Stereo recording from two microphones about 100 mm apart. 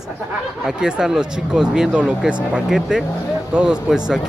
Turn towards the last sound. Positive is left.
turn(degrees=-5)  # may be behind; listen again after turning